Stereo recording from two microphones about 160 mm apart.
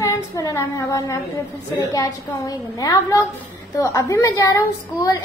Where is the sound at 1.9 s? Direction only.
20° left (ahead or behind).